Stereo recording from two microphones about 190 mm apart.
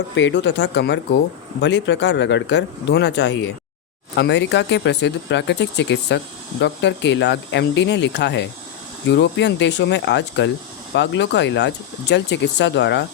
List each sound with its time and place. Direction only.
0.2 s speech: 70° left (ahead or behind)